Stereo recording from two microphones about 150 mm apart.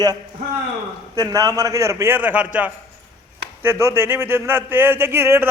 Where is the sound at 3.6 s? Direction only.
15° right (ahead or behind).